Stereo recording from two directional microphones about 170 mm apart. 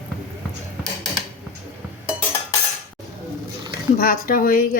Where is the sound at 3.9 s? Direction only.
55° left (ahead or behind).